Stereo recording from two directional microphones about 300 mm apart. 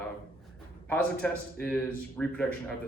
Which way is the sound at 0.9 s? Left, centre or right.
Centre.